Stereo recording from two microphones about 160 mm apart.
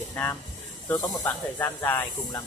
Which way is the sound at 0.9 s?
20° left (ahead or behind).